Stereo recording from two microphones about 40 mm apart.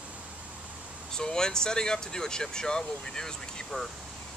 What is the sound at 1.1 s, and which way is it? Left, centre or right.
Speech, centre.